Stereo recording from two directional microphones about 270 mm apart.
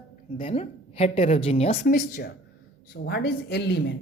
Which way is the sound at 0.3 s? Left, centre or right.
Left.